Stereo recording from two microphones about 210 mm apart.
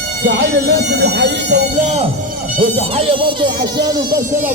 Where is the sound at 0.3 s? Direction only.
50° right (ahead or behind).